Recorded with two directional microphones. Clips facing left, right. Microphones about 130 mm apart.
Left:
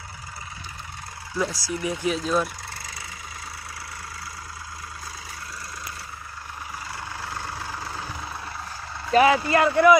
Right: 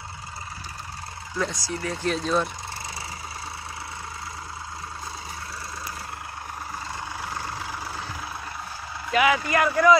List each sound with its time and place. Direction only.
1.3 s speech: 10° left (ahead or behind)
7.2 s vehicle: 15° right (ahead or behind)
9.1 s speech: 35° left (ahead or behind)